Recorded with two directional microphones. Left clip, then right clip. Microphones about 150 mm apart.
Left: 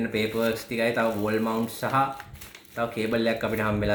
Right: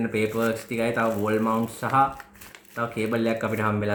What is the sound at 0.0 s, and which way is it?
Speech, 65° right (ahead or behind).